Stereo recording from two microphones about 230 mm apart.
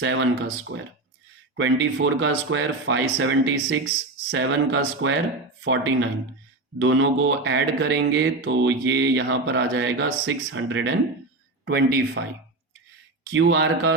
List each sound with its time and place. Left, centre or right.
0.0 s speech: right
0.7 s speech: right
1.5 s speech: right
11.6 s speech: right
13.3 s speech: right